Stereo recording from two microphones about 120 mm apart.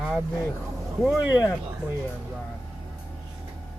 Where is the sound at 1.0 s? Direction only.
Centre (ahead or behind).